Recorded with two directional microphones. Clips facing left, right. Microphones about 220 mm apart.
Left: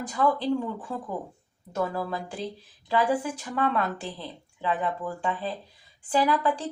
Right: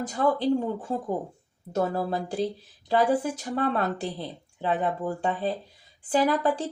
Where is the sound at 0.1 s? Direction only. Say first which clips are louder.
Right 1 dB; 40° right (ahead or behind).